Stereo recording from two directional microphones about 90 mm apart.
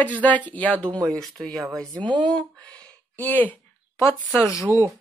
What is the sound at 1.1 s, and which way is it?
Speech, 5° left (ahead or behind).